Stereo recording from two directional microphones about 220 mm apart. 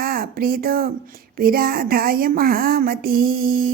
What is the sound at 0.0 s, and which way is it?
A woman's voice, 40° right (ahead or behind).